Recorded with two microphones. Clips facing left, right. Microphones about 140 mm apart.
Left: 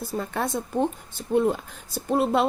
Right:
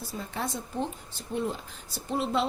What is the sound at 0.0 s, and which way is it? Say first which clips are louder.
A woman's voice: left 6 dB; 55° left (ahead or behind).